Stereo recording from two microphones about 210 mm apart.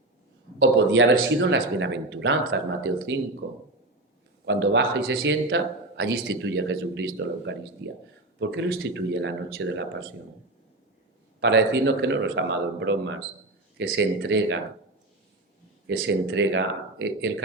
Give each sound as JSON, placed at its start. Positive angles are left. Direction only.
{"t": 1.1, "sound": "speech", "side_deg": -60}
{"t": 11.3, "sound": "speech", "side_deg": -55}
{"t": 16.0, "sound": "speech", "side_deg": -55}